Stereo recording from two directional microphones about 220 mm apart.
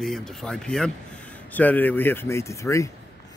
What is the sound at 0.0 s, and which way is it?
Speech, centre (ahead or behind).